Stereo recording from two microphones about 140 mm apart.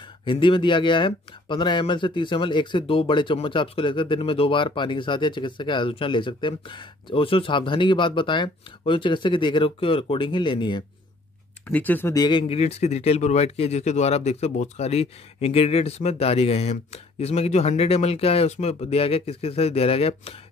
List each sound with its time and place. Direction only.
0.2 s speech: 35° left (ahead or behind)
11.6 s speech: 10° left (ahead or behind)
12.1 s speech: 30° left (ahead or behind)